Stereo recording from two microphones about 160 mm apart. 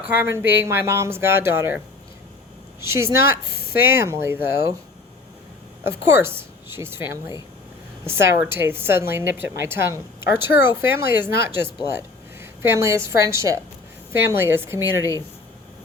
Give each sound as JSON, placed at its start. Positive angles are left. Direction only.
{"t": 0.0, "sound": "a woman's voice", "side_deg": -10}
{"t": 2.8, "sound": "a woman's voice", "side_deg": -15}
{"t": 5.8, "sound": "a woman's voice", "side_deg": -15}